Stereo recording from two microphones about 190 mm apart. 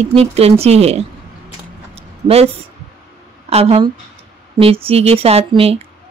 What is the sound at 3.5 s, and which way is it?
Speech, 30° right (ahead or behind).